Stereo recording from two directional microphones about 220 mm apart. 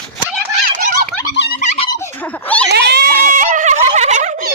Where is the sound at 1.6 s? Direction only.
30° left (ahead or behind).